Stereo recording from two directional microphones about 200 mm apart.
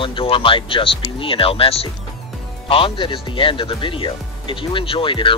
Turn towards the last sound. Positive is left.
turn(degrees=25)  # may be behind; listen again after turning